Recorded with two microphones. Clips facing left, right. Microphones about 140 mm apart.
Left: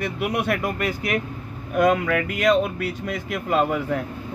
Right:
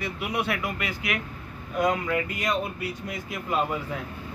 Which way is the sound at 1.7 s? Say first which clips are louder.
Left 6 dB; 65° left (ahead or behind).